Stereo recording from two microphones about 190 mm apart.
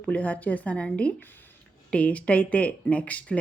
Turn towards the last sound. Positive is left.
turn(degrees=5)  # may be behind; listen again after turning